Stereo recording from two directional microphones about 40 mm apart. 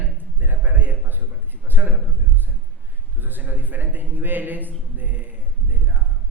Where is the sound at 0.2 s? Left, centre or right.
Right.